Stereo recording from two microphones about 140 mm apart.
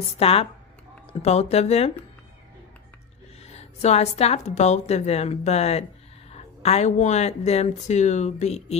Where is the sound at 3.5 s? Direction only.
50° left (ahead or behind).